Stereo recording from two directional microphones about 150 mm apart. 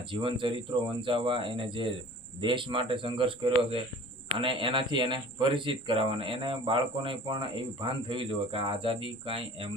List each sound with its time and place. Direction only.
0.1 s speech: 35° right (ahead or behind)